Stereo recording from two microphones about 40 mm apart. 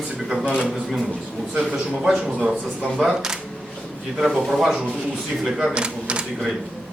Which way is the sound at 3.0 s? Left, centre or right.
Centre.